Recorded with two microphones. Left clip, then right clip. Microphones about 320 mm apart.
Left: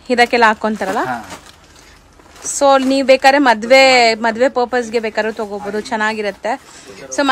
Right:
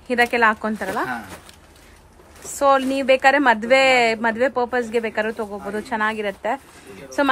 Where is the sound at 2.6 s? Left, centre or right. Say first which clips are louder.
Left 6 dB; centre.